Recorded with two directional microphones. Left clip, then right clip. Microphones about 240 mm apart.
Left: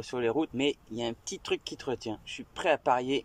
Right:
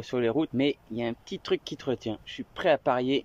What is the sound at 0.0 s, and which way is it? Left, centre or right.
Speech, centre.